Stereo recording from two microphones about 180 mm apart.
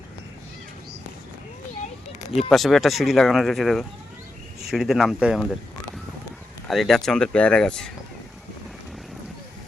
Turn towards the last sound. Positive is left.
turn(degrees=5)  # may be behind; listen again after turning